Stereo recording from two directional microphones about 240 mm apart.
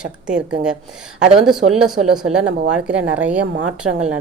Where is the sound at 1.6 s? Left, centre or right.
Right.